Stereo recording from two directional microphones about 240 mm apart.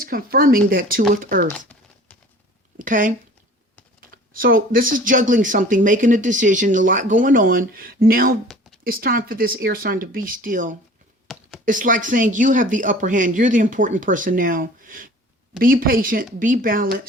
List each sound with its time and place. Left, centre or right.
0.0 s speech: right
2.7 s speech: right
11.3 s computer keyboard: centre
11.6 s speech: right